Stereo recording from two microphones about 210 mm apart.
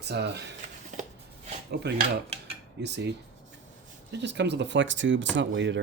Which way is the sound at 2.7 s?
55° right (ahead or behind).